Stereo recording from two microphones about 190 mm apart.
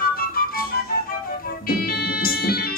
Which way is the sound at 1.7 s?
50° left (ahead or behind).